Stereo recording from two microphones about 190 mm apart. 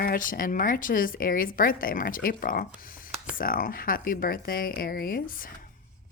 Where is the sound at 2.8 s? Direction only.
50° left (ahead or behind).